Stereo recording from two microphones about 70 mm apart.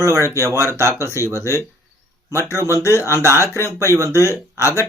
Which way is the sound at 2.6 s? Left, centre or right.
Left.